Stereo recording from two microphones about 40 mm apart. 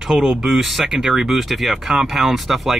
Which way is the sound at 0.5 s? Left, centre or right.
Centre.